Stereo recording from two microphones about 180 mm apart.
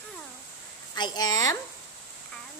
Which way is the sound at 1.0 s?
20° left (ahead or behind).